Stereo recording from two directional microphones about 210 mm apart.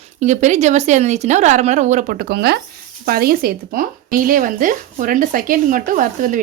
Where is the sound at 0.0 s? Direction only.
35° right (ahead or behind).